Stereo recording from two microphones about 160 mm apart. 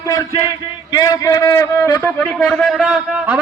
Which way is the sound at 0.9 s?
20° left (ahead or behind).